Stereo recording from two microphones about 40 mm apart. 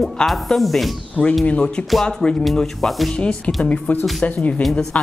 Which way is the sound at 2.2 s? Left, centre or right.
Centre.